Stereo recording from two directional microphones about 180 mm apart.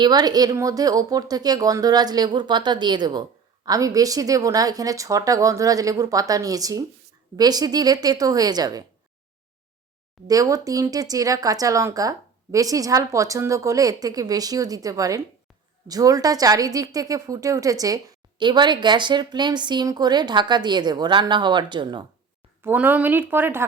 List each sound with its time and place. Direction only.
0.0 s a woman's voice: 20° right (ahead or behind)
10.2 s a woman's voice: 20° right (ahead or behind)
22.6 s speech: 10° right (ahead or behind)